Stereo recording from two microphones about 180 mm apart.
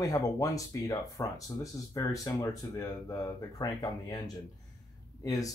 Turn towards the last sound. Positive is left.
turn(degrees=20)  # may be behind; listen again after turning